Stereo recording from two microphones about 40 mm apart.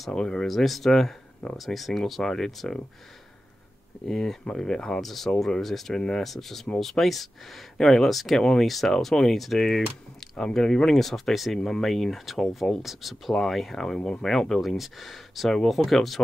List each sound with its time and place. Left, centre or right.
0.1 s speech: centre
0.5 s speech: centre
4.1 s speech: centre
5.0 s speech: centre
8.4 s speech: centre
8.6 s speech: centre
8.9 s speech: centre
13.3 s speech: centre
14.8 s speech: centre